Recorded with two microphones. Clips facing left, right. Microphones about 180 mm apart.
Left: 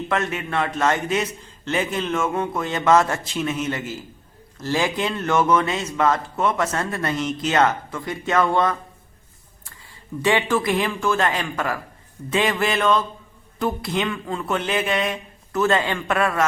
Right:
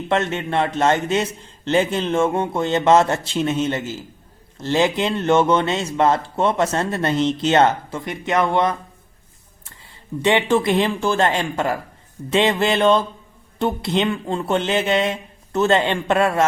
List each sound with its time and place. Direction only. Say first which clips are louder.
0.1 s speech: right 5 dB; 30° right (ahead or behind)
10.2 s speech: right 3 dB; 25° right (ahead or behind)